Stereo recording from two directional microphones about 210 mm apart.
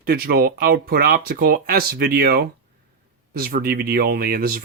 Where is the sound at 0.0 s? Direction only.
45° right (ahead or behind).